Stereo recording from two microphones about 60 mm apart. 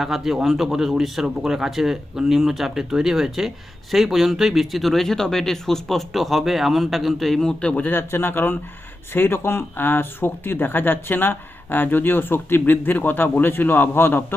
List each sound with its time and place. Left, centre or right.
0.0 s speech: centre
7.6 s speech: centre
7.9 s speech: left